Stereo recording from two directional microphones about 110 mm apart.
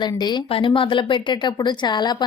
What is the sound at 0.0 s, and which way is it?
A woman's voice, 40° left (ahead or behind).